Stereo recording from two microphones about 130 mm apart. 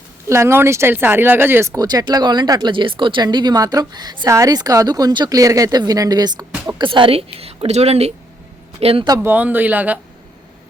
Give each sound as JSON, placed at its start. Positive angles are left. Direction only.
{"t": 0.3, "sound": "a woman's voice", "side_deg": -20}
{"t": 9.2, "sound": "speech", "side_deg": -15}